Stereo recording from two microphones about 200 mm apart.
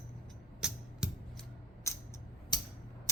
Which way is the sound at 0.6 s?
5° right (ahead or behind).